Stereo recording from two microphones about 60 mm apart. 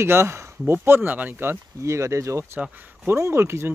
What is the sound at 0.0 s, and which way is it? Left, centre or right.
Speech, right.